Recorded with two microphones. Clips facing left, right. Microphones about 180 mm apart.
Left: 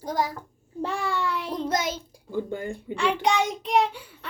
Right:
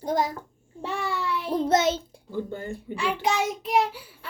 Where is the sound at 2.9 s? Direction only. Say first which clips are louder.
Left 2 dB; 5° right (ahead or behind).